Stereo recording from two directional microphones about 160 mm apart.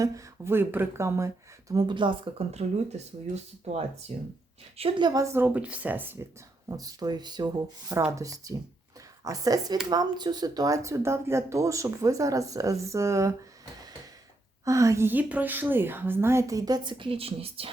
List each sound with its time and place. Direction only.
0.0 s a woman's voice: 15° right (ahead or behind)
6.7 s speech: 25° right (ahead or behind)
14.6 s a woman's voice: 20° right (ahead or behind); by 17.7 s 35° right (ahead or behind)